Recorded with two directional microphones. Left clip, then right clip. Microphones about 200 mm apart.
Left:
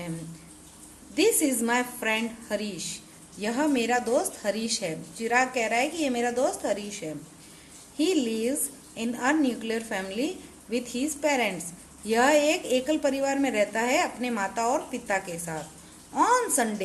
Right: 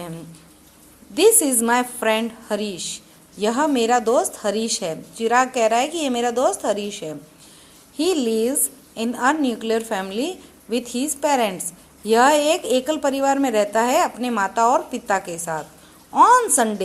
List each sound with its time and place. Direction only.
1.1 s a woman's voice: 20° right (ahead or behind)